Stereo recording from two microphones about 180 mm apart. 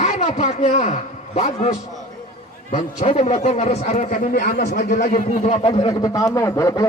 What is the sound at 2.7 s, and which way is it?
A man's voice, 40° left (ahead or behind).